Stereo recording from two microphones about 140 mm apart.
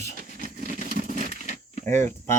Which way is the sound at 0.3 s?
80° right.